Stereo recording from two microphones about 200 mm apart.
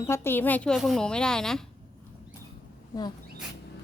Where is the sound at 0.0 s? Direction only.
15° left (ahead or behind).